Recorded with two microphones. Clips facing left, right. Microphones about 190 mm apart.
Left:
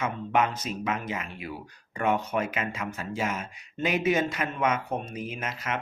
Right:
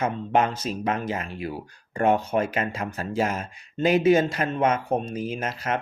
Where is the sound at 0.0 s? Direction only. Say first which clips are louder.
Right 3 dB; 30° right (ahead or behind).